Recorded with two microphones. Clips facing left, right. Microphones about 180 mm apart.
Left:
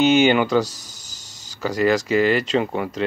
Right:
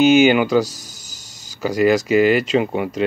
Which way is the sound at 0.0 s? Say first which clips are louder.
Right 3 dB; 10° right (ahead or behind).